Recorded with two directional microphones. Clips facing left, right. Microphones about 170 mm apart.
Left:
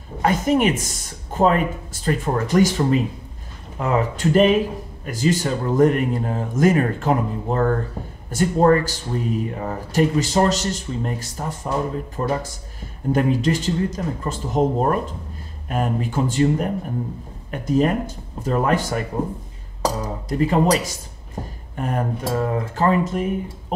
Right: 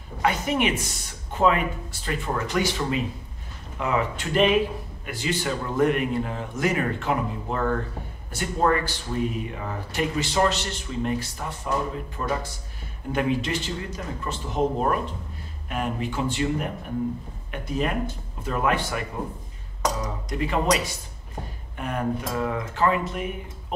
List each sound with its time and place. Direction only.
0.2 s speech: 45° left (ahead or behind)